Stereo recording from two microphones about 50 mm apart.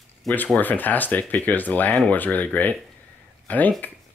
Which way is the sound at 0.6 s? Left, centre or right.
Left.